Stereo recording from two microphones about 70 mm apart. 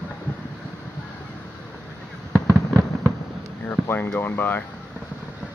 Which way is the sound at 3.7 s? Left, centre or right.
Left.